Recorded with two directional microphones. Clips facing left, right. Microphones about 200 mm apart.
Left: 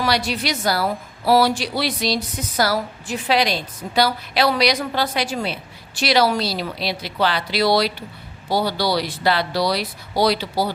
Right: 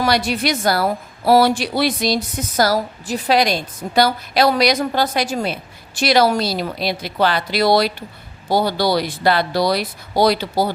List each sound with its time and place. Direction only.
0.0 s a woman's voice: 50° right (ahead or behind)